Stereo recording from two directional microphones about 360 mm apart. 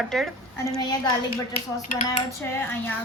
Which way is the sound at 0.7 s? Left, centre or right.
Centre.